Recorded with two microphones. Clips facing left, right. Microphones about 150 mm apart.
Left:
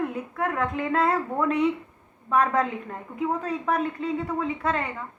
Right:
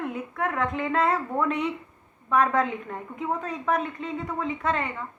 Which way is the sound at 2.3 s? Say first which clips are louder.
Even; 35° left (ahead or behind).